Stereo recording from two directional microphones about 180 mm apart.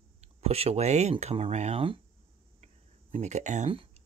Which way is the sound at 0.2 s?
35° right (ahead or behind).